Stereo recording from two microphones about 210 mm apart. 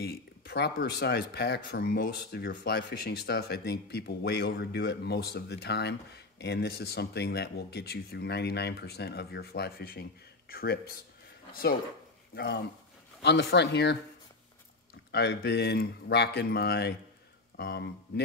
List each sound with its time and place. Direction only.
0.0 s speech: 50° left (ahead or behind)
13.2 s speech: 55° left (ahead or behind)
15.0 s speech: 50° left (ahead or behind)